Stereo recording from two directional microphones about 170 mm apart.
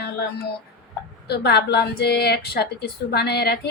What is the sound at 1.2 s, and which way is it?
A woman's voice, 75° left (ahead or behind).